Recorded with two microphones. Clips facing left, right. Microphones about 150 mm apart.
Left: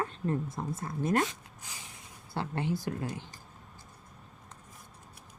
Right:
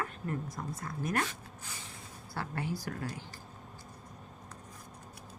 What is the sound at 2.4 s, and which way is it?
Speech, 20° left (ahead or behind).